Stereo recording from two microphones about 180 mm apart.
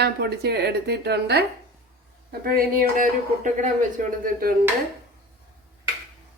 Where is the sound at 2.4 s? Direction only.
55° right (ahead or behind).